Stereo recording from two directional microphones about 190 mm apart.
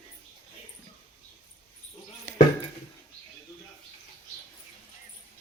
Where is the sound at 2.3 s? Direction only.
10° left (ahead or behind).